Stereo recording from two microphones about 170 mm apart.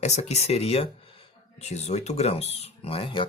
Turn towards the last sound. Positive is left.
turn(degrees=30)  # may be behind; listen again after turning